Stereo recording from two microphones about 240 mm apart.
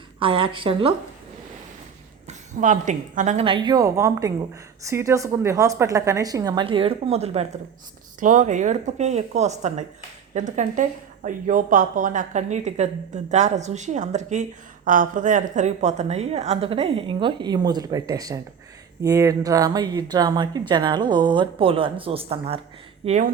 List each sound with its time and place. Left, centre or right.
0.2 s a woman's voice: right
2.2 s a woman's voice: right